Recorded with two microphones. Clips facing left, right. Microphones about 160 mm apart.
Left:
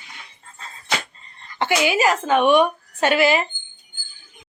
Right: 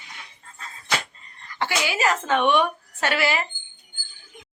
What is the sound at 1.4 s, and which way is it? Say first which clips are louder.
A woman's voice: left 6 dB; 20° left (ahead or behind).